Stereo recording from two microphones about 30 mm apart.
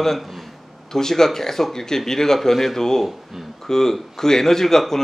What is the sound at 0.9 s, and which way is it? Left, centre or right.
Speech, centre.